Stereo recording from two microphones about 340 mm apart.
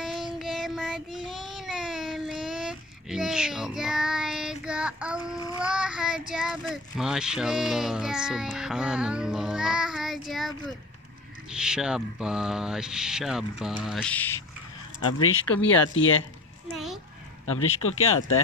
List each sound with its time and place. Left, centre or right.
0.0 s child singing: centre
5.6 s speech: centre
11.5 s speech: centre
15.1 s speech: left
16.7 s a sound: centre
17.6 s speech: left